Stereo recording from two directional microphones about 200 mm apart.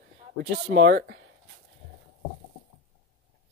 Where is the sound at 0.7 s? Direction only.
50° right (ahead or behind).